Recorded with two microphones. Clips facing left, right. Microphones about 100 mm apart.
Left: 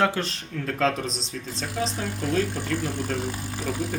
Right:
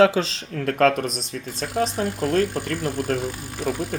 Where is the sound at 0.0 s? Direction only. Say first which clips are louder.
Right 7 dB; 90° right.